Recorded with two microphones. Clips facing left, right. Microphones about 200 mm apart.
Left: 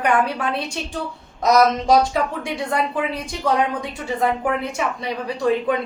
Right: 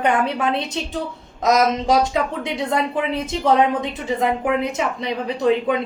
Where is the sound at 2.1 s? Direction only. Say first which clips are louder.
Right 1 dB; 20° right (ahead or behind).